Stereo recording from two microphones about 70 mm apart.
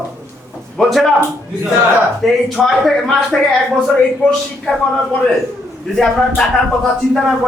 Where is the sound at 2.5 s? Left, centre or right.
Centre.